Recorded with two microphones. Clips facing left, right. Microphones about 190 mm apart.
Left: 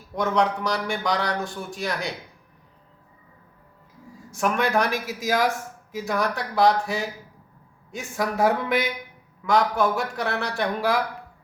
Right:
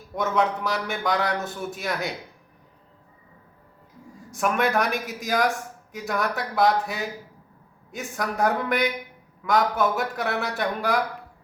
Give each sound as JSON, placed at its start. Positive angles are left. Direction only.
{"t": 0.2, "sound": "speech", "side_deg": -5}
{"t": 4.3, "sound": "speech", "side_deg": 0}